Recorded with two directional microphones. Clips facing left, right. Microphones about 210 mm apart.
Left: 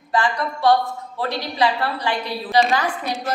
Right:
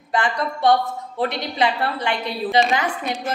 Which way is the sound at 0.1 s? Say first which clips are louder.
Left 1 dB; 20° right (ahead or behind).